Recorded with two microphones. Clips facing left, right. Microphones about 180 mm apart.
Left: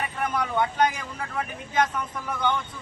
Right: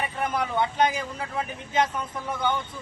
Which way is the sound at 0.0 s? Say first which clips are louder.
Even; 30° right (ahead or behind).